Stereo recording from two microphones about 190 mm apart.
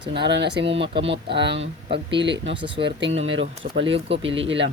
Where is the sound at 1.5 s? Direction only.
25° right (ahead or behind).